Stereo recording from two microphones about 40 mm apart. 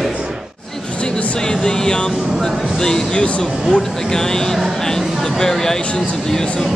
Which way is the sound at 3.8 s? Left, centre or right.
Centre.